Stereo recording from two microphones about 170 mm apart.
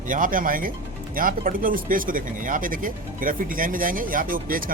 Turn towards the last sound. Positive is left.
turn(degrees=-55)  # may be behind; listen again after turning